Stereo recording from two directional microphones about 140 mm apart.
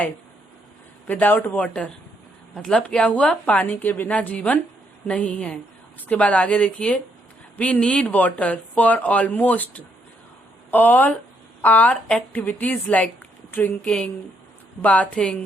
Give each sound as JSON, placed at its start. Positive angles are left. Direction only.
{"t": 1.0, "sound": "speech", "side_deg": 10}